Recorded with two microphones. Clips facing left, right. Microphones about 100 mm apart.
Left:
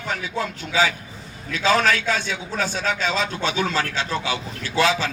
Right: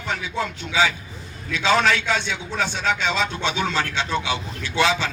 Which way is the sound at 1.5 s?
40° left (ahead or behind).